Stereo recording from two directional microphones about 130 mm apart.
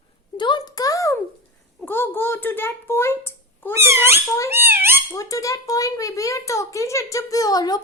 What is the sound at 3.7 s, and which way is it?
Cat, 20° right (ahead or behind).